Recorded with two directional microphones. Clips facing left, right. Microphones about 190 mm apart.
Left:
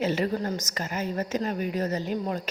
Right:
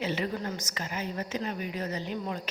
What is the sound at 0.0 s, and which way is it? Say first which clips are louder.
A woman's voice: left 5 dB; 40° left (ahead or behind).